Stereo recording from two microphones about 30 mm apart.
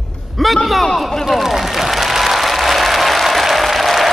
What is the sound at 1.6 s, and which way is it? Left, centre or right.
Applause, centre.